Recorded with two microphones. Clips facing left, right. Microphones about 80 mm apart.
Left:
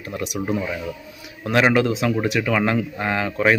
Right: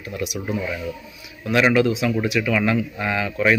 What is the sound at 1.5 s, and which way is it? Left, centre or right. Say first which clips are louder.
Speech: even; left.